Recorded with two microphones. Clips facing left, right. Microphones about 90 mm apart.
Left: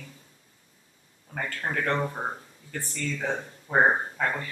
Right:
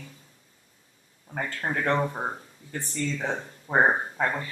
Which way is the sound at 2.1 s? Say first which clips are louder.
Right 1 dB; 5° right (ahead or behind).